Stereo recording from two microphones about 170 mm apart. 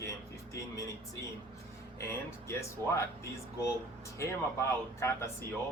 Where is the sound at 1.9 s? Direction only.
15° left (ahead or behind).